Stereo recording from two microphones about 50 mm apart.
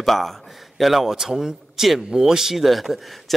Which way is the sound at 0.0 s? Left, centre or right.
Centre.